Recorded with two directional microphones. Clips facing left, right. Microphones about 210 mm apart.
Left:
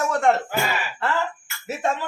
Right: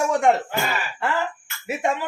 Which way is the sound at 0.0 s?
15° right (ahead or behind).